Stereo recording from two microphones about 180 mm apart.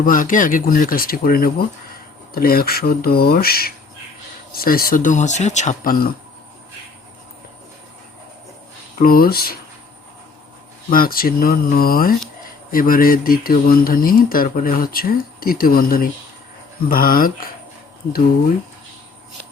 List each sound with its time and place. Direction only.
0.0 s speech: 50° left (ahead or behind)
9.0 s speech: 55° left (ahead or behind)
10.8 s speech: 55° left (ahead or behind)